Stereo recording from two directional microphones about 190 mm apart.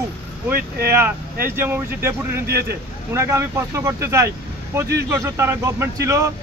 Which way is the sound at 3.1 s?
15° right (ahead or behind).